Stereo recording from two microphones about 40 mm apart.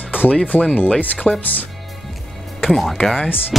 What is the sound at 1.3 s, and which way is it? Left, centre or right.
Speech, centre.